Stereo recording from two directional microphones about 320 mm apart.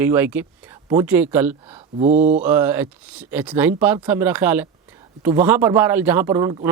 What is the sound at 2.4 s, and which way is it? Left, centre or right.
Speech, centre.